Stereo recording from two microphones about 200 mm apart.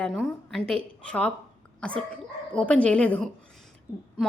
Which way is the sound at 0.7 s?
5° left (ahead or behind).